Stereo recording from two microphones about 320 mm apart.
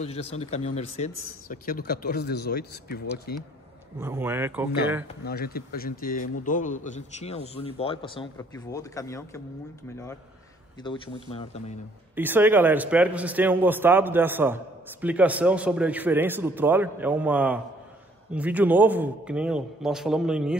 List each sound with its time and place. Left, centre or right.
0.0 s a man's voice: centre
4.0 s speech: centre
5.2 s a man's voice: left
12.2 s a man's voice: centre